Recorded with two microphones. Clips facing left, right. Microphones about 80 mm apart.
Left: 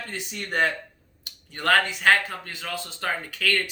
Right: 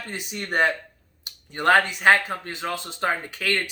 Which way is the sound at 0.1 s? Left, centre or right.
Centre.